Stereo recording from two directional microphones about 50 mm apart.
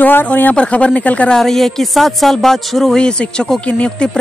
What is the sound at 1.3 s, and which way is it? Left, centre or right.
Speech, centre.